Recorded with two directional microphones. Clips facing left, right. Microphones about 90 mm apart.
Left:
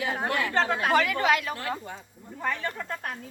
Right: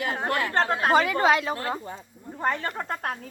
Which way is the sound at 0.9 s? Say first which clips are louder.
Right 3 dB; 25° right (ahead or behind).